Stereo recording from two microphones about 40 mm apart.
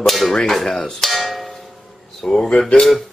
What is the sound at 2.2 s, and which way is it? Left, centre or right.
Speech, centre.